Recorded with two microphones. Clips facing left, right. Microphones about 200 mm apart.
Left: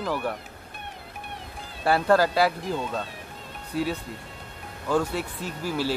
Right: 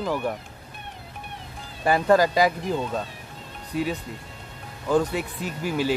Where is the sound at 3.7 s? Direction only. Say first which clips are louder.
Right 1 dB; 15° right (ahead or behind).